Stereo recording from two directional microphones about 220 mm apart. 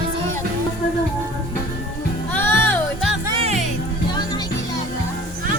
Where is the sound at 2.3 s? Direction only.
10° left (ahead or behind).